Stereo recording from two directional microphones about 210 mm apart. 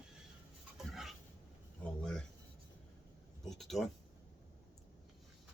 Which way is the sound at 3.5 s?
Centre (ahead or behind).